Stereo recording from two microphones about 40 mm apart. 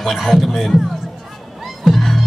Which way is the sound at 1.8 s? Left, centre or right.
Centre.